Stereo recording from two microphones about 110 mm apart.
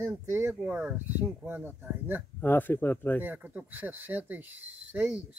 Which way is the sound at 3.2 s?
15° right (ahead or behind).